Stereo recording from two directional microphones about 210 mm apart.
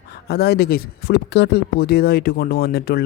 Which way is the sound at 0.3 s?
50° left (ahead or behind).